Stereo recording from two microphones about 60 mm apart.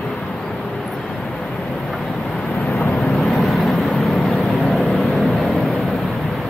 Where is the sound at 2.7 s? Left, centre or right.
Centre.